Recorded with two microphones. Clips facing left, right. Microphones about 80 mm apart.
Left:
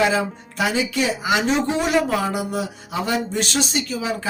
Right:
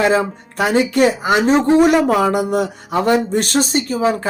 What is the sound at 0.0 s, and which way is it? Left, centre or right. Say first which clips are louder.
Speech: right 4 dB; right.